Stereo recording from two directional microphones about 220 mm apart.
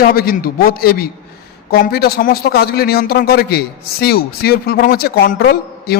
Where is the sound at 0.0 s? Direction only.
40° left (ahead or behind).